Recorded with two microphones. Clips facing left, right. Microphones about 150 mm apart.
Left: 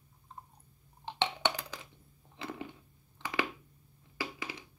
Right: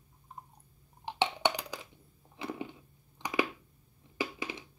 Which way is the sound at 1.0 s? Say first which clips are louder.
Right 3 dB; 10° right (ahead or behind).